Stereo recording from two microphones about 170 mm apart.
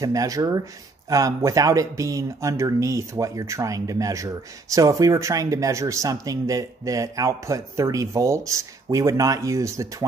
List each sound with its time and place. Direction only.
0.0 s speech: 20° right (ahead or behind)